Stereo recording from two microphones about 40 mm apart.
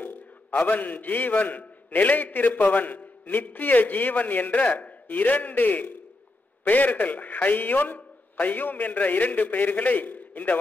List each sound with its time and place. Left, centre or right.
0.0 s a man's voice: left